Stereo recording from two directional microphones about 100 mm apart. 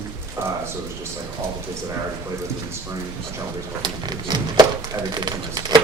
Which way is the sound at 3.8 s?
45° right (ahead or behind).